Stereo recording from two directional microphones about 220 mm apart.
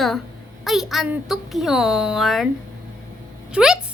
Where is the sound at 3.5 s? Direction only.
5° right (ahead or behind).